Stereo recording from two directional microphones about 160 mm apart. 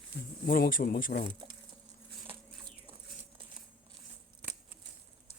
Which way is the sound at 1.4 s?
35° right (ahead or behind).